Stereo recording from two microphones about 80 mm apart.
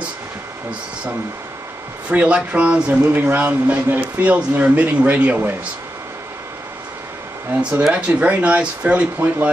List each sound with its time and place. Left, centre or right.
2.0 s speech: centre
7.8 s speech: centre